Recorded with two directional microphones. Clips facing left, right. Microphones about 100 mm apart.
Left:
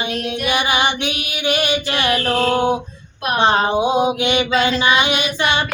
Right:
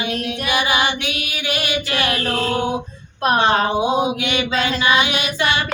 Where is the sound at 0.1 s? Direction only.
25° left (ahead or behind).